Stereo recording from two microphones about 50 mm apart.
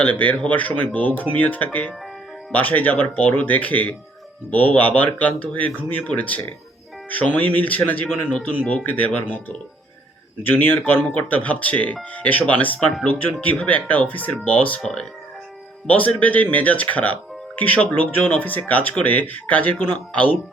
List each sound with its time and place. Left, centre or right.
0.0 s speech: left
10.4 s speech: left
15.9 s speech: left